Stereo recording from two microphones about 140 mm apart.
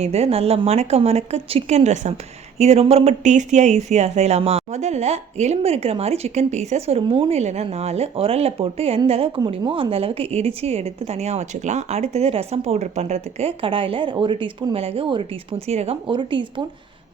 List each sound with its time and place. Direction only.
0.0 s a woman's voice: 50° right (ahead or behind)